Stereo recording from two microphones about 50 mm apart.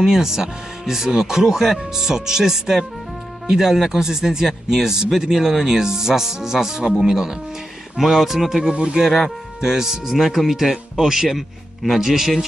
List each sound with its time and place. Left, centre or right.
0.0 s a man's voice: centre
8.7 s speech: right
9.0 s a man's voice: centre